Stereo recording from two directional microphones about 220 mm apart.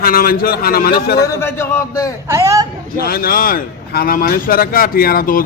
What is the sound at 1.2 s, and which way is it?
Speech, 10° left (ahead or behind).